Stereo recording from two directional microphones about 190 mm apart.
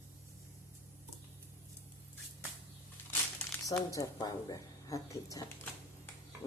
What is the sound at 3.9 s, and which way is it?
Speech, 20° left (ahead or behind).